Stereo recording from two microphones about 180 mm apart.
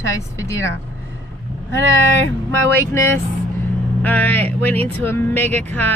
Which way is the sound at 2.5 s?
15° left (ahead or behind).